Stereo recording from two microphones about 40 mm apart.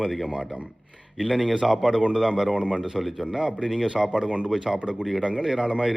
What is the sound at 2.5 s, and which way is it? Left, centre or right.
Speech, right.